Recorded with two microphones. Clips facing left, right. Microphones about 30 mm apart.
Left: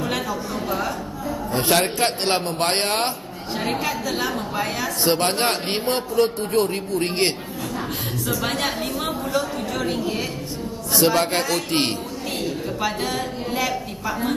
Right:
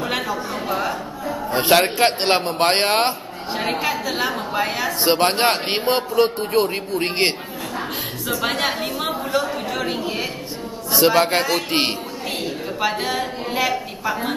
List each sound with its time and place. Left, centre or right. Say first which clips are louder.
0.0 s a man's voice: right 2 dB; centre
8.3 s a sound: right 3 dB; centre
10.9 s a woman's voice: right 3 dB; centre